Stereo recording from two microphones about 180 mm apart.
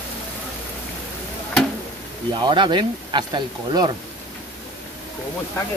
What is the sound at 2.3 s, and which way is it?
Speech, 25° right (ahead or behind).